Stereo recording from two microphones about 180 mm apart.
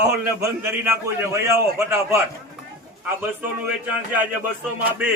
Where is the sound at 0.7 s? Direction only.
15° right (ahead or behind).